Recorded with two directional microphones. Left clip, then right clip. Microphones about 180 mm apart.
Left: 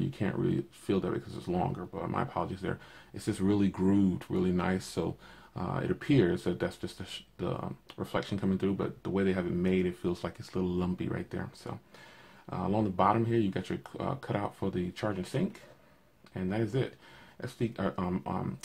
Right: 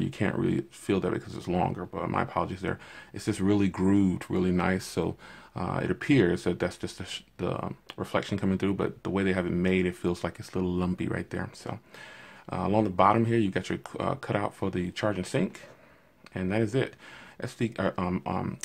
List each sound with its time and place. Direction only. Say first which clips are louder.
0.2 s speech: right 4 dB; 30° right (ahead or behind)